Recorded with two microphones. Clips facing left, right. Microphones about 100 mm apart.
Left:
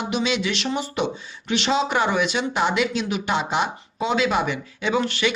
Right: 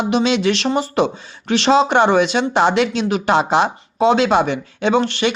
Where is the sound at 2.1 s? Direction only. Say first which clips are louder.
Right 8 dB; 30° right (ahead or behind).